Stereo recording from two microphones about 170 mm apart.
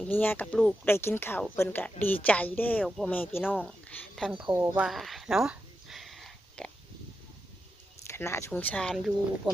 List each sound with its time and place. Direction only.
0.0 s speech: 10° left (ahead or behind)
4.4 s speech: 30° right (ahead or behind)
4.8 s a sound: centre (ahead or behind)
8.0 s speech: 15° left (ahead or behind)